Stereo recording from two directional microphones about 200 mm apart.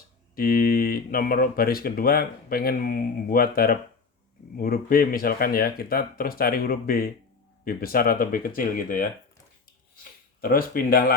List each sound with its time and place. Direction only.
0.3 s speech: 45° left (ahead or behind)